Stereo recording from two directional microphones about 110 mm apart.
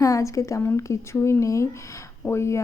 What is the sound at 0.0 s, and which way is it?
Speech, 30° left (ahead or behind).